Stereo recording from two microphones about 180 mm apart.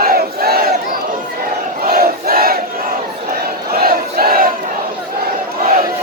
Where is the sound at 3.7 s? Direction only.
55° right (ahead or behind).